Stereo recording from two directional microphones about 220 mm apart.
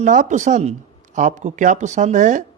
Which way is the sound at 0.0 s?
35° right (ahead or behind).